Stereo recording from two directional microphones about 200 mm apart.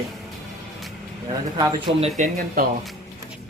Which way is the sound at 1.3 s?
20° right (ahead or behind).